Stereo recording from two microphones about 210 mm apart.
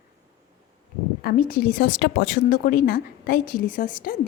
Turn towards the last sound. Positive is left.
turn(degrees=40)  # may be behind; listen again after turning